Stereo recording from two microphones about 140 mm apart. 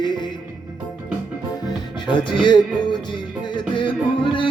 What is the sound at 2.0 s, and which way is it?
Music, 35° left (ahead or behind).